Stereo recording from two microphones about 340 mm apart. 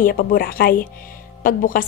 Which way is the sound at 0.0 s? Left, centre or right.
Left.